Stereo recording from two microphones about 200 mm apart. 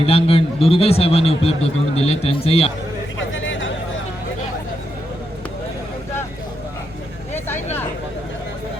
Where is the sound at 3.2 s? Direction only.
70° left (ahead or behind).